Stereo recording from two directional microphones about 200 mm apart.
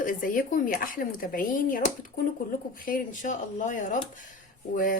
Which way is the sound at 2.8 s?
40° left (ahead or behind).